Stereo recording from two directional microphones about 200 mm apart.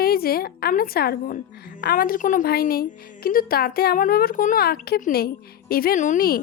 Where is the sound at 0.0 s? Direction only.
50° left (ahead or behind).